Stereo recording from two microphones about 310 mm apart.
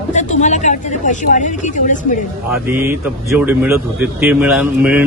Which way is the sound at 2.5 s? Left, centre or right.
Centre.